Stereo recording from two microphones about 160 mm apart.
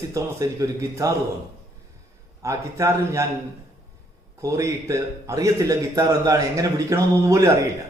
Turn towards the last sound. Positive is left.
turn(degrees=-20)  # may be behind; listen again after turning